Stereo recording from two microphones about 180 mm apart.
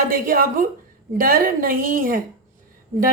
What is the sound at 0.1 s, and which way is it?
Speech, 50° right (ahead or behind).